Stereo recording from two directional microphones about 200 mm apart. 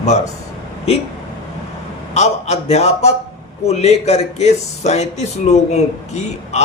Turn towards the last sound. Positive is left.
turn(degrees=35)  # may be behind; listen again after turning